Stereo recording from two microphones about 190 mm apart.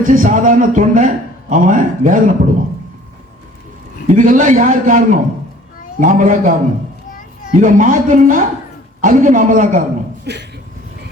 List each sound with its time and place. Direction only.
0.0 s a man's voice: 45° right (ahead or behind)
4.0 s a man's voice: 40° right (ahead or behind)
7.6 s a man's voice: 45° right (ahead or behind)
10.3 s speech: 60° right (ahead or behind)